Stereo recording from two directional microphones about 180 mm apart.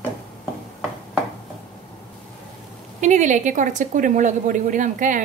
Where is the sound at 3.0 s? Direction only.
40° right (ahead or behind).